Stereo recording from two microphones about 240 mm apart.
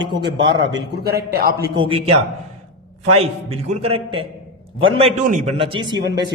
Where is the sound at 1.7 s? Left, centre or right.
Right.